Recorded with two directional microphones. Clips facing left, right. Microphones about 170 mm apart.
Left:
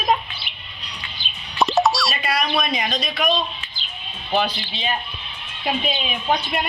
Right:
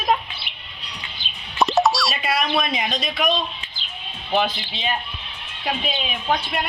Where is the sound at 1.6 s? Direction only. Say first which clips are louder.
Even; centre (ahead or behind).